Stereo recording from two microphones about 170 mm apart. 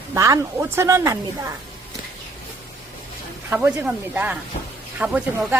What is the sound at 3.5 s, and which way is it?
Speech, 10° right (ahead or behind).